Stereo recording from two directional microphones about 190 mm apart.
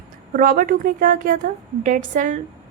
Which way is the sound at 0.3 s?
45° right (ahead or behind).